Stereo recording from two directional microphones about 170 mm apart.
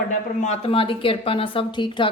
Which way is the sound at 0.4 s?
35° left (ahead or behind).